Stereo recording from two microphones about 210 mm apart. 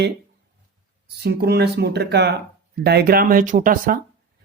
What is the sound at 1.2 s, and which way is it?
Speech, 50° right (ahead or behind).